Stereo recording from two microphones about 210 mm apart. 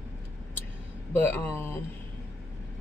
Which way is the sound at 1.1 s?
10° left (ahead or behind).